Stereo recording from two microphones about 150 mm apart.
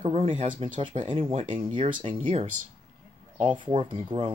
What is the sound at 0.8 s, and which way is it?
Speech, 35° right (ahead or behind).